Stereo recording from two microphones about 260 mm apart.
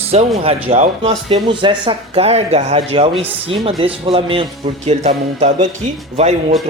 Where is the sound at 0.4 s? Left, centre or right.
Right.